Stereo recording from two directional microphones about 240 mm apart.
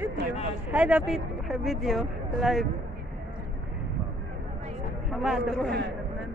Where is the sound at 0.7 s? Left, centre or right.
Centre.